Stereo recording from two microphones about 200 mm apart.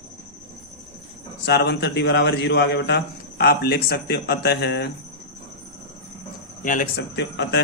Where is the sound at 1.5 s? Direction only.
55° left (ahead or behind).